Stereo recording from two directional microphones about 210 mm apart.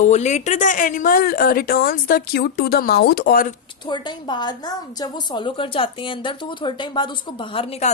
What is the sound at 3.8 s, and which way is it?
A woman's voice, 20° left (ahead or behind).